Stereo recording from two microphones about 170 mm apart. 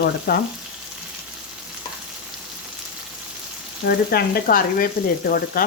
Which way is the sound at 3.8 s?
65° left (ahead or behind).